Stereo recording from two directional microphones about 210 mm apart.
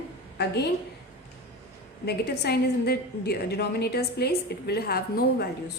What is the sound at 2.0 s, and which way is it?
A woman's voice, 50° left (ahead or behind).